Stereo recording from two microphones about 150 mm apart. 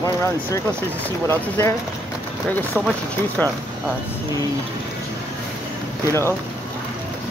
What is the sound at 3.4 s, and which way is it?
Speech, 10° left (ahead or behind).